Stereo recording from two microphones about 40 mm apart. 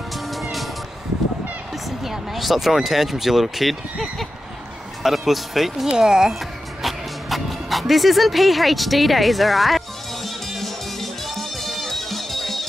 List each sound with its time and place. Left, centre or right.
0.3 s music: centre
1.9 s speech: centre
5.9 s speech: centre
6.8 s music: centre